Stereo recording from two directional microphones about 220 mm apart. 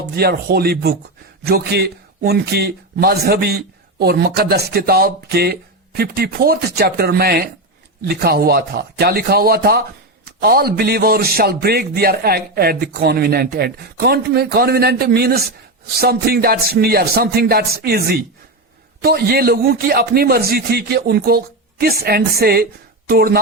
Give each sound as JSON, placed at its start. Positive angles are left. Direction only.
{"t": 0.2, "sound": "a man's voice", "side_deg": -45}